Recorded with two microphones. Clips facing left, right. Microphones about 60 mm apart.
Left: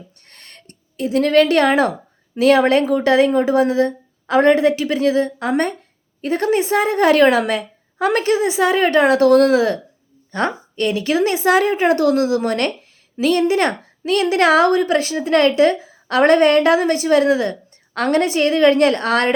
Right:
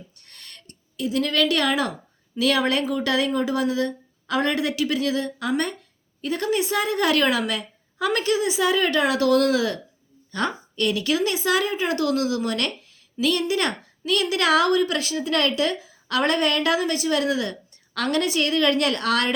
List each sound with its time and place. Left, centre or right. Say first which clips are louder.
0.3 s a woman's voice: left 2 dB; left